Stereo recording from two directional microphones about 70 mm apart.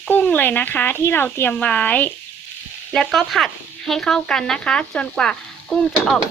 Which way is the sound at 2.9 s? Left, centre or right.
Centre.